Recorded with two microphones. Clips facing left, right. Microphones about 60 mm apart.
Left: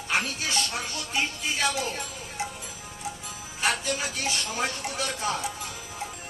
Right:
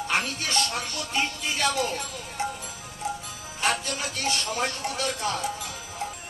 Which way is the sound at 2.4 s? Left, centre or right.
Centre.